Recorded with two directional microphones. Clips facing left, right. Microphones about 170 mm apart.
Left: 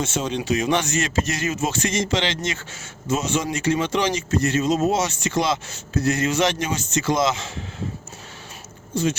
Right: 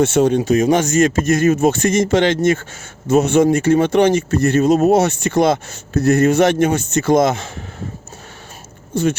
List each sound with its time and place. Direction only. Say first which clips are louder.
0.0 s speech: right 11 dB; 60° right (ahead or behind)
8.9 s speech: right 5 dB; 60° right (ahead or behind)